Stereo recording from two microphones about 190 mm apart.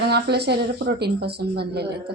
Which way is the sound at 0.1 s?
60° right (ahead or behind).